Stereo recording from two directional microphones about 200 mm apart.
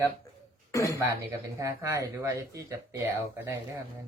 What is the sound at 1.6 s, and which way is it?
Speech, 15° right (ahead or behind).